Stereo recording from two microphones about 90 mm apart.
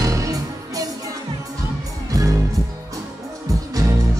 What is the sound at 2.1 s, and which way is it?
Music, 40° right (ahead or behind).